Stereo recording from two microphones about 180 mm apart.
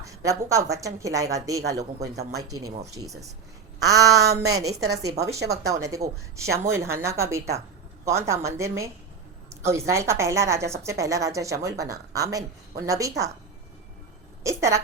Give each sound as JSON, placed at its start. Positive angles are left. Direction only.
{"t": 0.0, "sound": "a woman's voice", "side_deg": -15}
{"t": 2.3, "sound": "a sound", "side_deg": -20}
{"t": 5.5, "sound": "a woman's voice", "side_deg": -15}
{"t": 14.4, "sound": "a woman's voice", "side_deg": -15}